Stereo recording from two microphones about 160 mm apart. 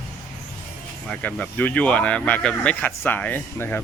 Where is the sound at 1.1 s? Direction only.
10° left (ahead or behind).